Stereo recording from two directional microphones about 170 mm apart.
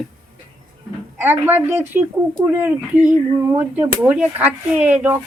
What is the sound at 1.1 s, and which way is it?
Speech, 10° right (ahead or behind).